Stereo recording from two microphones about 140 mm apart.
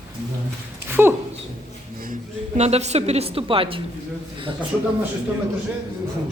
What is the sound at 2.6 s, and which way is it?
A woman's voice, 50° right (ahead or behind).